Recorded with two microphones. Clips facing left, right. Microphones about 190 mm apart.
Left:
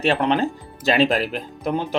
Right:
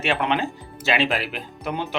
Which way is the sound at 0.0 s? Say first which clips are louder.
Left 4 dB; 35° left (ahead or behind).